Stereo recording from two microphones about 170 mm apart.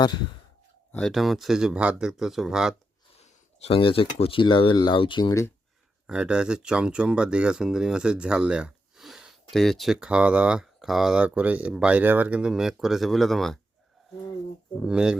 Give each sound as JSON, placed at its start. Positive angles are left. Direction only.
{"t": 0.9, "sound": "speech", "side_deg": 0}
{"t": 3.2, "sound": "speech", "side_deg": 35}
{"t": 6.1, "sound": "speech", "side_deg": -5}
{"t": 14.8, "sound": "speech", "side_deg": -5}